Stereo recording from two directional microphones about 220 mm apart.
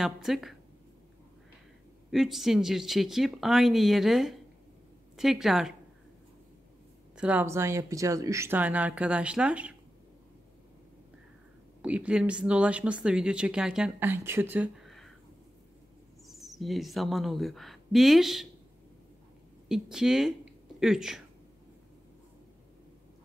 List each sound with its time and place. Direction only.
0.0 s speech: centre (ahead or behind)
2.0 s speech: centre (ahead or behind)
7.2 s speech: 5° right (ahead or behind)
11.8 s speech: 5° right (ahead or behind)
16.3 s speech: centre (ahead or behind)
19.7 s speech: centre (ahead or behind)